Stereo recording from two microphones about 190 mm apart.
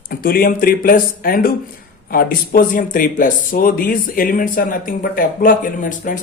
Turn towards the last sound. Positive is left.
turn(degrees=45)  # may be behind; listen again after turning